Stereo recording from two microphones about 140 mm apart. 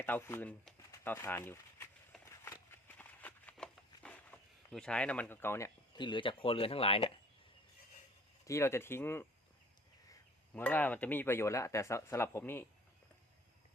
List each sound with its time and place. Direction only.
0.0 s speech: 15° left (ahead or behind)
0.8 s a sound: 20° left (ahead or behind)
6.0 s speech: 35° left (ahead or behind)
8.4 s speech: 20° left (ahead or behind)
10.5 s speech: 10° left (ahead or behind)